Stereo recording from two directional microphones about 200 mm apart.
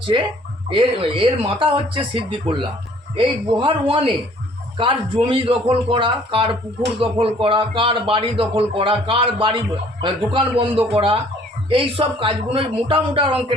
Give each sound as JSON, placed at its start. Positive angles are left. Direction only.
{"t": 0.0, "sound": "speech", "side_deg": -25}
{"t": 3.2, "sound": "speech", "side_deg": -25}